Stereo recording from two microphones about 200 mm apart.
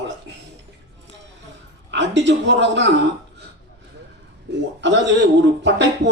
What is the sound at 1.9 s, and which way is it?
Speech, 60° right (ahead or behind).